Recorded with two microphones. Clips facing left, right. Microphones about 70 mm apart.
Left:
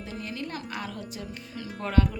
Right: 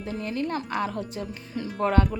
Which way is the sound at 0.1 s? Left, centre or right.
Right.